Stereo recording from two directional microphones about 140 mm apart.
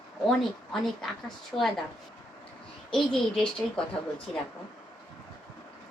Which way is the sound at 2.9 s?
Centre (ahead or behind).